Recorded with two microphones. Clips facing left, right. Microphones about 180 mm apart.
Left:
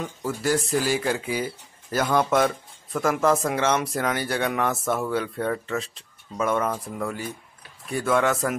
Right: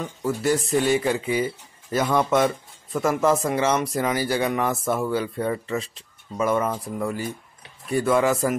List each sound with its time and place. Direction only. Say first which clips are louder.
0.0 s speech: right 3 dB; centre (ahead or behind)